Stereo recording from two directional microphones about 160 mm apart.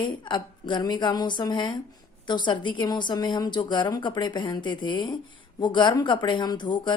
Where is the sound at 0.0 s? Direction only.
30° left (ahead or behind).